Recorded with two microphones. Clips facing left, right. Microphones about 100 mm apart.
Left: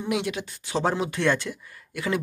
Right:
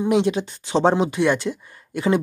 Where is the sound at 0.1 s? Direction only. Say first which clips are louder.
Right 6 dB; 25° right (ahead or behind).